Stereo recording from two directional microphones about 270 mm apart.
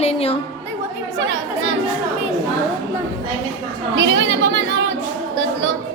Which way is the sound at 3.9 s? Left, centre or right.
Right.